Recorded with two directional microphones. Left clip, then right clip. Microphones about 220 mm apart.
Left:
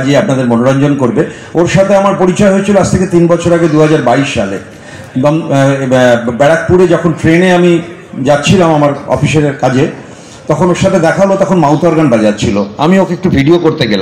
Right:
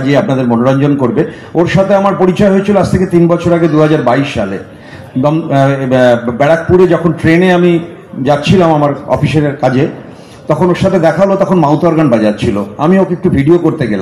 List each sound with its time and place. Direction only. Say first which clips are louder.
0.1 s a man's voice: left 1 dB; 30° left (ahead or behind)